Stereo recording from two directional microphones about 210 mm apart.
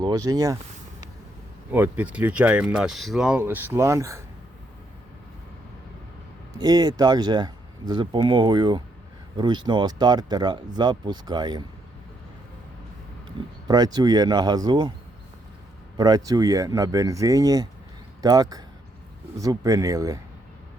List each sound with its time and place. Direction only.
0.0 s speech: 20° right (ahead or behind)
1.7 s speech: 10° right (ahead or behind)
6.6 s speech: 20° right (ahead or behind)
13.7 s speech: 20° right (ahead or behind)
16.0 s speech: 20° right (ahead or behind)